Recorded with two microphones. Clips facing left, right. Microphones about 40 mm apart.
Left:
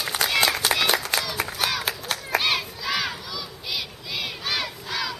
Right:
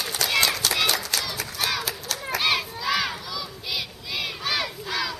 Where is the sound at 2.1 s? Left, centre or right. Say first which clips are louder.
Left 2 dB; left.